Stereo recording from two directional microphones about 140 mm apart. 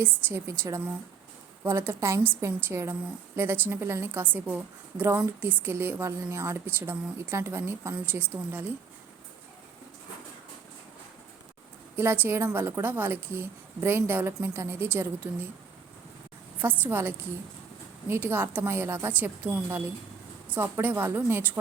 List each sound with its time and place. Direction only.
0.0 s a woman's voice: 15° right (ahead or behind)
11.9 s a woman's voice: 15° right (ahead or behind)
16.6 s a woman's voice: 10° right (ahead or behind)